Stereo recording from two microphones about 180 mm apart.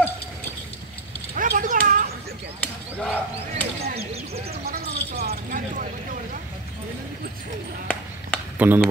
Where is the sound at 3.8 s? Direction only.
35° right (ahead or behind).